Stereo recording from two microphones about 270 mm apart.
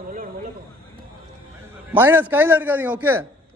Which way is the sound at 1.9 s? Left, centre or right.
Centre.